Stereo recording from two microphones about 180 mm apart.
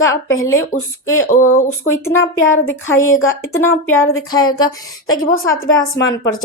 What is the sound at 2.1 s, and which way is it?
Speech, 90° left.